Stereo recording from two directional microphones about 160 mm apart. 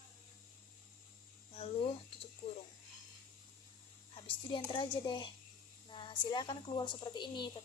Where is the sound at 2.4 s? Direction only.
35° left (ahead or behind).